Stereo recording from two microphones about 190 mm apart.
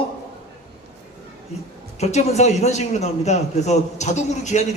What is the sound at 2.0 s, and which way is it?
A man's voice, 35° left (ahead or behind).